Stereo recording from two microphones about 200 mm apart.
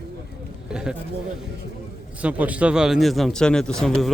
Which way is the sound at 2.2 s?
5° right (ahead or behind).